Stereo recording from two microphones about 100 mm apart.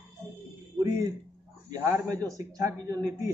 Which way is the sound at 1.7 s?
30° right (ahead or behind).